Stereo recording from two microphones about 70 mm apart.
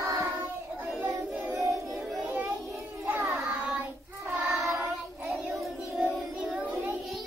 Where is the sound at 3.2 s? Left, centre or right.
Right.